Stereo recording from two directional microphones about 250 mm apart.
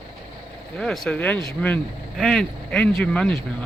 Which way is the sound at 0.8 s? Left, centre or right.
Centre.